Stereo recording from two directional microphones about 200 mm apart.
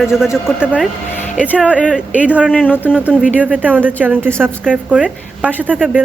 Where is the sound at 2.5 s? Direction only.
10° left (ahead or behind).